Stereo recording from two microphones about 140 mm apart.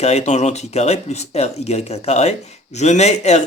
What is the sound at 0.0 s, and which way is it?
Speech, 50° left (ahead or behind).